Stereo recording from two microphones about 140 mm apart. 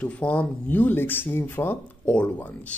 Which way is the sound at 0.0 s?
10° left (ahead or behind).